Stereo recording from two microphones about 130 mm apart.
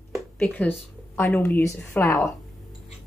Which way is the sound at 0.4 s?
15° left (ahead or behind).